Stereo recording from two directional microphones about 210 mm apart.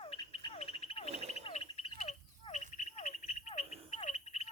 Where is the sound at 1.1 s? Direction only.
30° right (ahead or behind).